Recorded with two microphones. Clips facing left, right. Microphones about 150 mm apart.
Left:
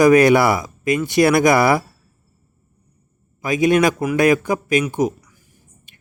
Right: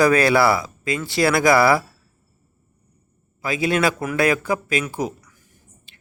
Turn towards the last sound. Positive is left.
turn(degrees=15)  # may be behind; listen again after turning